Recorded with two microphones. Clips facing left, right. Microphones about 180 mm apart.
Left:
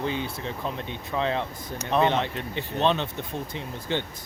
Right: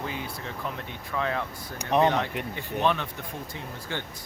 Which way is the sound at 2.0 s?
25° left (ahead or behind).